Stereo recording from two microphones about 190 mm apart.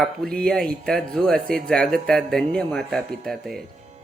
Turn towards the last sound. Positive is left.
turn(degrees=0)  # may be behind; listen again after turning